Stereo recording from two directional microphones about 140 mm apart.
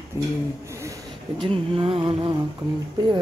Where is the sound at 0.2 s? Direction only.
20° right (ahead or behind).